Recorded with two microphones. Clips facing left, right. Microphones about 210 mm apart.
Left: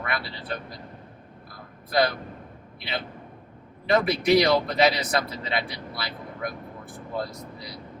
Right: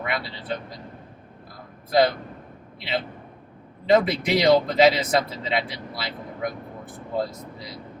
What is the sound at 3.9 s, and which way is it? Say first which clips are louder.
Speech: right 1 dB; 20° right (ahead or behind).